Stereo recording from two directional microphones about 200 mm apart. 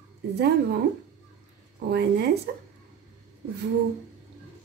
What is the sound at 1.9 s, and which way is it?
Speech, 55° right (ahead or behind).